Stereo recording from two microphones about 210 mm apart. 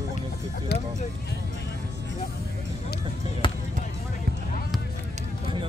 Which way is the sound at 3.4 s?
25° left (ahead or behind).